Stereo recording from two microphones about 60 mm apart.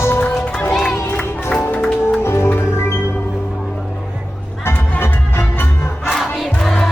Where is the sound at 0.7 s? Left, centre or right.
Centre.